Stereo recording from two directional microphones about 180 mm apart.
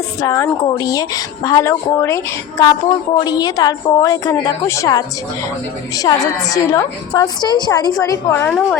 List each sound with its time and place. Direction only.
0.2 s a woman's voice: 20° left (ahead or behind)